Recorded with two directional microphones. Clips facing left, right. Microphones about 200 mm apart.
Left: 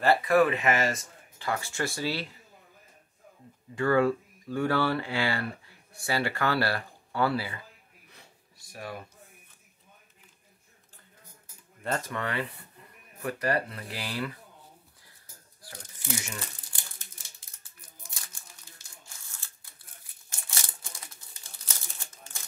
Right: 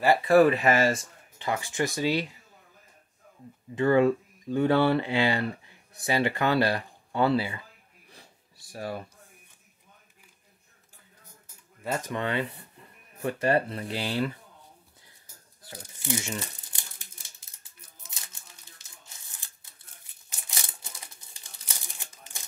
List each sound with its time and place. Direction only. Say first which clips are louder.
0.2 s speech: right 4 dB; 35° right (ahead or behind)
1.4 s speech: right 3 dB; 15° right (ahead or behind)
3.7 s speech: right 3 dB; 20° right (ahead or behind)
8.7 s speech: right 5 dB; 30° right (ahead or behind)
11.8 s speech: right 2 dB; 15° right (ahead or behind)
15.6 s speech: right 4 dB; 25° right (ahead or behind)
18.0 s crumpling: even; 20° right (ahead or behind)